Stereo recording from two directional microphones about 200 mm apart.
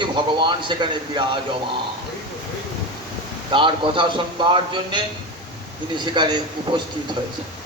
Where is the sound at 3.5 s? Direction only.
25° right (ahead or behind).